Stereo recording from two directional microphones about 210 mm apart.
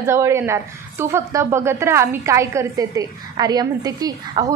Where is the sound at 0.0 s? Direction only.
15° right (ahead or behind).